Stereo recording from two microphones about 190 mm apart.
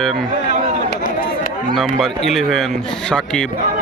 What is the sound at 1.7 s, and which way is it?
Speech, centre (ahead or behind).